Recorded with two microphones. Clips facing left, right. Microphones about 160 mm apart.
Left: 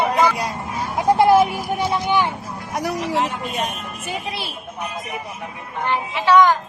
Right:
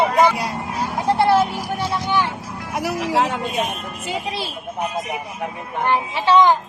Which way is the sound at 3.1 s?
90° right.